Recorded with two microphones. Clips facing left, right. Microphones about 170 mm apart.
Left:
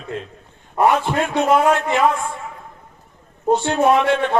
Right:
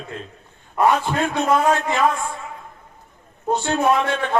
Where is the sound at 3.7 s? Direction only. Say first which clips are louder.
Left 2 dB; 25° left (ahead or behind).